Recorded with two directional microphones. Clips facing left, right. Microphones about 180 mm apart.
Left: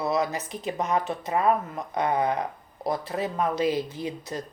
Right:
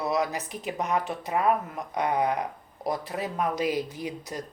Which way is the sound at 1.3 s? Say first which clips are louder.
Left 1 dB; 30° left (ahead or behind).